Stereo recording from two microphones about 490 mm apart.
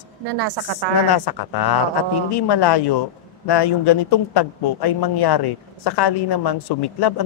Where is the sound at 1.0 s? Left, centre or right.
Left.